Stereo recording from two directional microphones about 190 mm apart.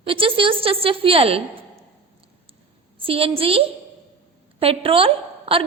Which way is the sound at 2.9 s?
30° right (ahead or behind).